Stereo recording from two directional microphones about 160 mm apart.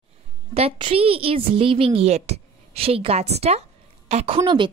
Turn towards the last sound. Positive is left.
turn(degrees=-30)  # may be behind; listen again after turning